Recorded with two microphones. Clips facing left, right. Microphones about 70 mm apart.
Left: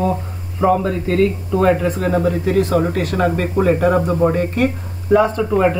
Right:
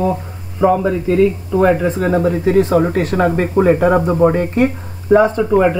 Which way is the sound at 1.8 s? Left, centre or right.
Right.